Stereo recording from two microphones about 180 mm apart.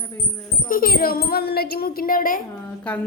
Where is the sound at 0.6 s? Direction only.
50° left (ahead or behind).